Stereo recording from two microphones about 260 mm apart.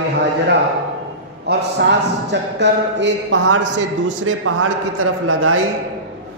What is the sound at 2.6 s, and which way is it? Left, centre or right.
A man's voice, right.